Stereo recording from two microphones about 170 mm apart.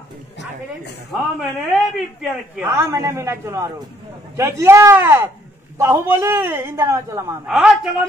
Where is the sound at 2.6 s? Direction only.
15° right (ahead or behind).